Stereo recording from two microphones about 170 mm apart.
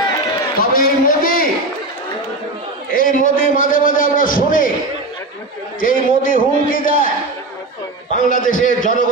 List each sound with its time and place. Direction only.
0.6 s a man's voice: 60° left (ahead or behind)
2.9 s a man's voice: 55° left (ahead or behind)
5.8 s a man's voice: 55° left (ahead or behind)
8.1 s a man's voice: 50° left (ahead or behind)